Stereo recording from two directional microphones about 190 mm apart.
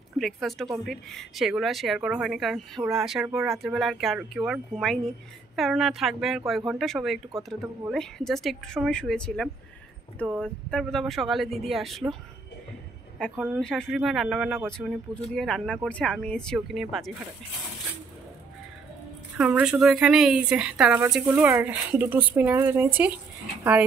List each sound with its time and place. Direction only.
0.2 s speech: centre (ahead or behind)
13.4 s speech: centre (ahead or behind)
19.3 s speech: 5° right (ahead or behind)